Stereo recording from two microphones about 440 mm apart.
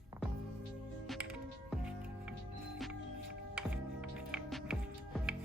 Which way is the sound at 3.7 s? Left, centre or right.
Centre.